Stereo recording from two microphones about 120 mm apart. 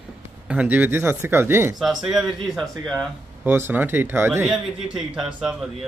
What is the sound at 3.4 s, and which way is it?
A man's voice, 20° right (ahead or behind).